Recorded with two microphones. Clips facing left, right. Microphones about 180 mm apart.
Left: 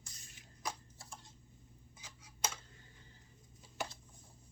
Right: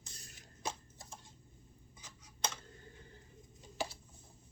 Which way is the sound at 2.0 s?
10° left (ahead or behind).